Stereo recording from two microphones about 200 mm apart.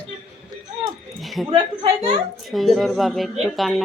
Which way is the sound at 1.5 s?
25° right (ahead or behind).